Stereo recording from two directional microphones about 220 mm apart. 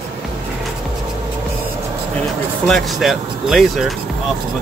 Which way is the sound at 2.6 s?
Centre (ahead or behind).